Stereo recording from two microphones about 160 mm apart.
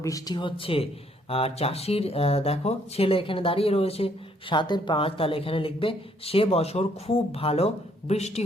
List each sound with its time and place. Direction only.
0.0 s speech: 20° left (ahead or behind); by 8.4 s 40° left (ahead or behind)